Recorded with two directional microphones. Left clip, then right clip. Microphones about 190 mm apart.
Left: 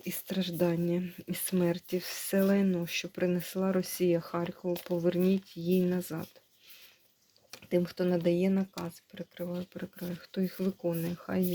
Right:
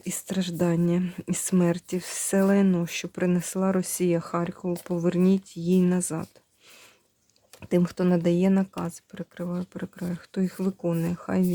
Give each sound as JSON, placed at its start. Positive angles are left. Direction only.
{"t": 0.0, "sound": "speech", "side_deg": -25}
{"t": 7.6, "sound": "speech", "side_deg": -40}